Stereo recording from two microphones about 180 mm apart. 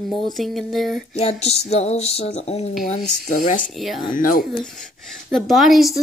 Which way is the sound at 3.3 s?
45° left (ahead or behind).